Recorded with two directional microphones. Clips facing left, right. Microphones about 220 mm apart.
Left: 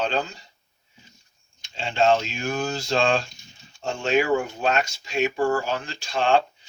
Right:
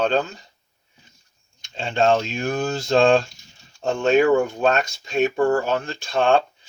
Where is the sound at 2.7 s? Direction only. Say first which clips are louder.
Right 8 dB; 55° right (ahead or behind).